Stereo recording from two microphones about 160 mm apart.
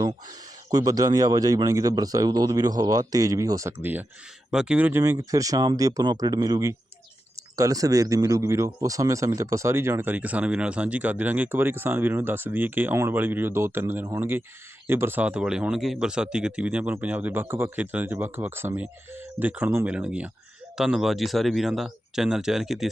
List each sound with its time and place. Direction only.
0.7 s a man's voice: 25° right (ahead or behind); by 22.9 s centre (ahead or behind)